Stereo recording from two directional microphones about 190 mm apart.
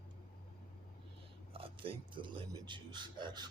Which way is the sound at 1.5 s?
30° right (ahead or behind).